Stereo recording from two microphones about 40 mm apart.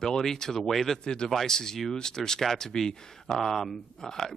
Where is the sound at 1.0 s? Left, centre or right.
Centre.